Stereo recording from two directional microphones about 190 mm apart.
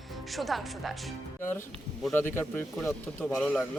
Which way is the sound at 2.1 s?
10° left (ahead or behind).